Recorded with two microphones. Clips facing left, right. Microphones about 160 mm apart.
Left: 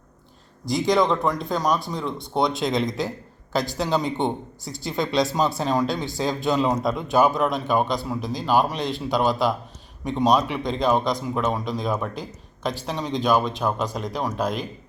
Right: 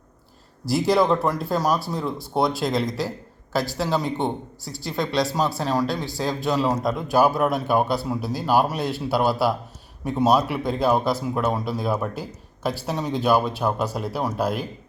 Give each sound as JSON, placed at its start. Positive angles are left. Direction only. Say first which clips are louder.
{"t": 0.6, "sound": "speech", "louder": "right 1 dB", "side_deg": -5}